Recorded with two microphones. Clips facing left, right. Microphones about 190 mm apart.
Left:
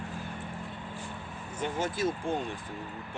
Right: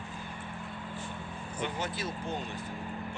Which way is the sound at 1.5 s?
45° left (ahead or behind).